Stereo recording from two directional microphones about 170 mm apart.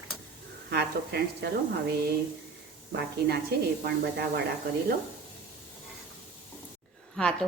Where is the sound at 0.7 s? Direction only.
70° right (ahead or behind).